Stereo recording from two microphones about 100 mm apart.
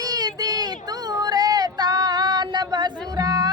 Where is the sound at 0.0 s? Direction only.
40° right (ahead or behind).